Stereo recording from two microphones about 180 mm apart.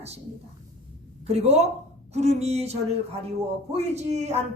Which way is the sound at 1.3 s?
35° right (ahead or behind).